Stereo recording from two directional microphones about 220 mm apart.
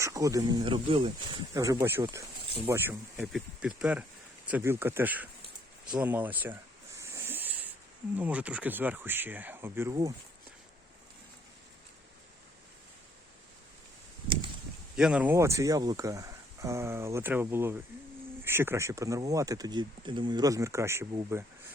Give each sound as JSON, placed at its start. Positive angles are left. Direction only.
{"t": 0.0, "sound": "speech", "side_deg": -15}
{"t": 7.0, "sound": "a sound", "side_deg": -10}
{"t": 8.1, "sound": "speech", "side_deg": -5}
{"t": 14.9, "sound": "speech", "side_deg": -5}